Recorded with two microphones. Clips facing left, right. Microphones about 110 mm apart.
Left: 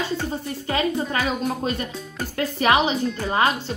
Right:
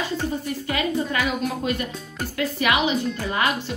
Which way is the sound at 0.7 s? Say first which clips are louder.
Left 2 dB; 30° left (ahead or behind).